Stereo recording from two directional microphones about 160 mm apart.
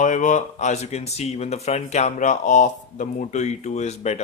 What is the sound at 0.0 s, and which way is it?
Speech, 50° left (ahead or behind).